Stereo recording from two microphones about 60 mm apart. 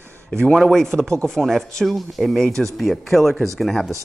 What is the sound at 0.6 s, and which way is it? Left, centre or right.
Speech, centre.